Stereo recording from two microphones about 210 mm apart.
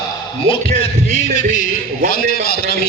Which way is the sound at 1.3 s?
40° left (ahead or behind).